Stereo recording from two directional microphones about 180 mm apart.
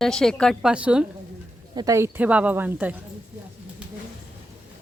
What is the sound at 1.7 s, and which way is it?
Speech, 20° right (ahead or behind).